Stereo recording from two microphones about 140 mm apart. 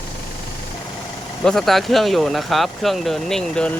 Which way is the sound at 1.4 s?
5° left (ahead or behind).